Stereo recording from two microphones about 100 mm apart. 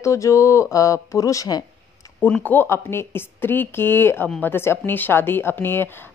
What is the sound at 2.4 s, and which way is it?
Speech, 20° left (ahead or behind).